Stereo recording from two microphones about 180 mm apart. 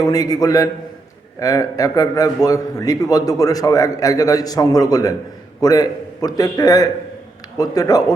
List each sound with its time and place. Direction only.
0.0 s a man's voice: 20° left (ahead or behind)